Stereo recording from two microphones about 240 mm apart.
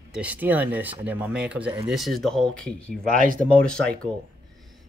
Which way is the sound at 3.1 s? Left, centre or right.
Right.